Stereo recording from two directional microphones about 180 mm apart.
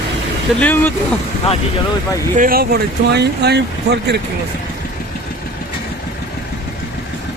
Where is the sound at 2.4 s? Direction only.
55° right (ahead or behind).